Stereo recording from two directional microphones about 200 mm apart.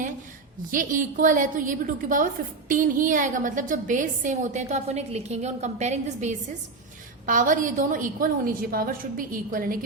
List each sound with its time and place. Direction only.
0.7 s a woman's voice: 40° right (ahead or behind)